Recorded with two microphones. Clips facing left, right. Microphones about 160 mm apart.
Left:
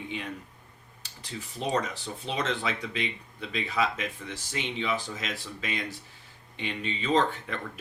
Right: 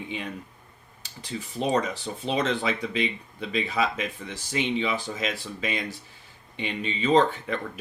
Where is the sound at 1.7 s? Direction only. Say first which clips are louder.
Right 3 dB; 20° right (ahead or behind).